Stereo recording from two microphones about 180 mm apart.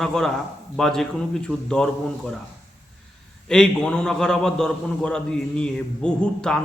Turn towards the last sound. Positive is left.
turn(degrees=5)  # may be behind; listen again after turning